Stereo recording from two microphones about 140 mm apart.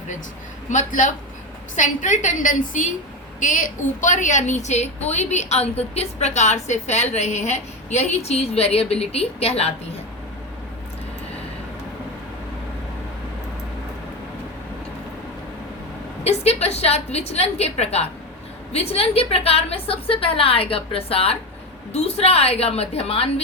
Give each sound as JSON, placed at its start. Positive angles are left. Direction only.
{"t": 0.7, "sound": "a woman's voice", "side_deg": 65}
{"t": 16.2, "sound": "a woman's voice", "side_deg": 50}